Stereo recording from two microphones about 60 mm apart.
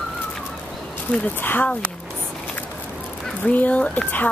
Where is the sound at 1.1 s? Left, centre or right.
Left.